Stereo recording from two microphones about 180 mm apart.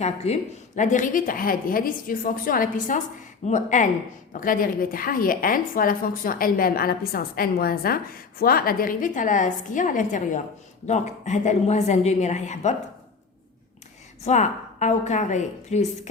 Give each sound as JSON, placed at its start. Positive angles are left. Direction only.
{"t": 0.2, "sound": "a woman's voice", "side_deg": 35}
{"t": 14.3, "sound": "a woman's voice", "side_deg": 40}